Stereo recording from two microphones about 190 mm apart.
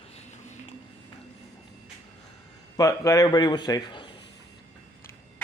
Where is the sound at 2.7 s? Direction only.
15° left (ahead or behind).